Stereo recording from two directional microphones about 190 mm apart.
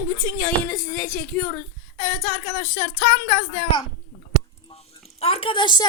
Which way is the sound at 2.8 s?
40° left (ahead or behind).